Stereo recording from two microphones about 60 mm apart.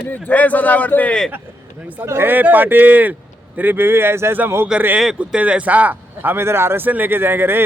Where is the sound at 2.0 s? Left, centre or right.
Right.